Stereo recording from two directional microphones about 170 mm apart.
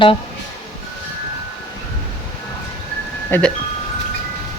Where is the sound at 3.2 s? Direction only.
10° left (ahead or behind).